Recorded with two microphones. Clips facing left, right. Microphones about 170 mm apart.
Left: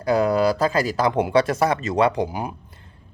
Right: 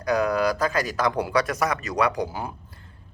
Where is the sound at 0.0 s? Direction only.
25° left (ahead or behind).